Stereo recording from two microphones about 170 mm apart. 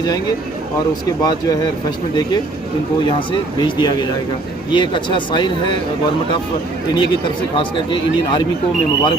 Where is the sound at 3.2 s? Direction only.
25° left (ahead or behind).